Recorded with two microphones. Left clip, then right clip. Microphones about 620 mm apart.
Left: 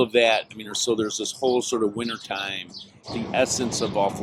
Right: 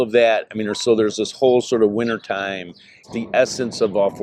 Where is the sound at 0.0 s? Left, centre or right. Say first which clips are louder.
Right 4 dB; right.